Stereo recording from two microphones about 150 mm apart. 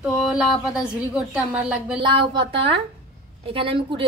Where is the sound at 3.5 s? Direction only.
35° right (ahead or behind).